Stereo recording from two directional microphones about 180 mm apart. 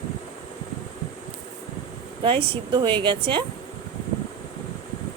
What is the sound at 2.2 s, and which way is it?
Speech, 30° right (ahead or behind).